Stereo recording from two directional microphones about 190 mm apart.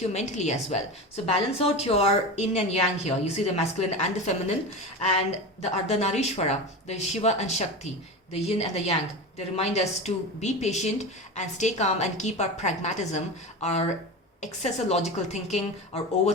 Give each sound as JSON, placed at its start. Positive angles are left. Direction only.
{"t": 0.1, "sound": "a woman's voice", "side_deg": 35}
{"t": 5.7, "sound": "a woman's voice", "side_deg": 35}